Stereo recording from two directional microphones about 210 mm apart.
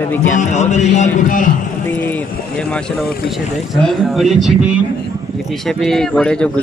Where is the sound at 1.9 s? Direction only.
10° left (ahead or behind).